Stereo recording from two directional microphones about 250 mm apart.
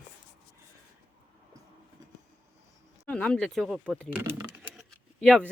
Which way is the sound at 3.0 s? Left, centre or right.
Centre.